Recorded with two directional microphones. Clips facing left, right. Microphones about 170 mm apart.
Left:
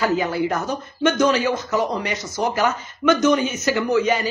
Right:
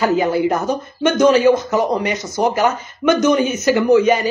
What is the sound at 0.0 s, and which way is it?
Speech, 15° right (ahead or behind).